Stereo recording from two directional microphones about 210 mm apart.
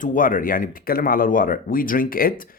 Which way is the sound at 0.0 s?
40° left (ahead or behind).